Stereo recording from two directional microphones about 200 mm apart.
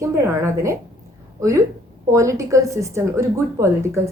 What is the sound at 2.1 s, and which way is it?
Speech, 15° right (ahead or behind).